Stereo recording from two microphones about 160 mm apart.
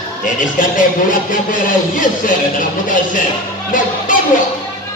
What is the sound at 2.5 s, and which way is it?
Speech, 55° left (ahead or behind).